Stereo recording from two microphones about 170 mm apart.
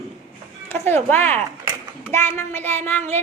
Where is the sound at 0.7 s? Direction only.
15° left (ahead or behind).